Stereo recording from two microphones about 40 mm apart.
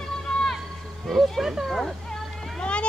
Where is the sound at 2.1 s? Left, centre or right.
Left.